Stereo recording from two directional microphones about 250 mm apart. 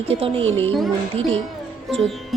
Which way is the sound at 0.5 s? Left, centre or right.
Centre.